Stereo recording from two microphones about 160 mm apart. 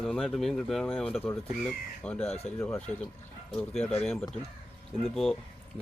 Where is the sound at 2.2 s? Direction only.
40° left (ahead or behind).